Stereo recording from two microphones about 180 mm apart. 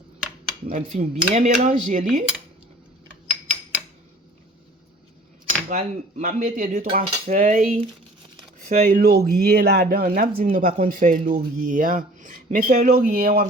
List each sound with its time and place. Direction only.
0.7 s speech: 45° right (ahead or behind)
3.2 s a sound: 5° right (ahead or behind)
5.6 s speech: 50° right (ahead or behind)
9.0 s speech: 55° right (ahead or behind)